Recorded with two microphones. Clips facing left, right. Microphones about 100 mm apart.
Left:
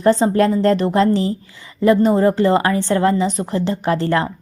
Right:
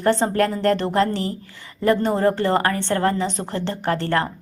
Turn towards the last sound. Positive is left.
turn(degrees=15)  # may be behind; listen again after turning